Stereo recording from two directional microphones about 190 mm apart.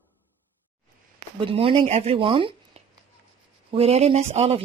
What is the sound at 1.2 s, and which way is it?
Speech, 30° right (ahead or behind).